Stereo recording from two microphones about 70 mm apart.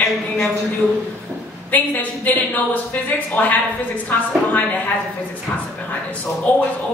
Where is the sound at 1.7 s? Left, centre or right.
Left.